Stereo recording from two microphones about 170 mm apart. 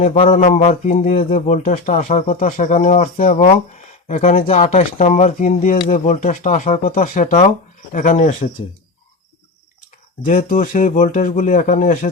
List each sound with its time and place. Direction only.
0.0 s speech: 35° left (ahead or behind); by 7.3 s 55° left (ahead or behind)
7.3 s speech: 35° left (ahead or behind)
10.2 s speech: 50° left (ahead or behind)